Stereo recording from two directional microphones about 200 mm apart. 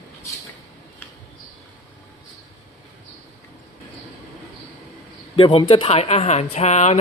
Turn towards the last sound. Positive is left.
turn(degrees=35)  # may be behind; listen again after turning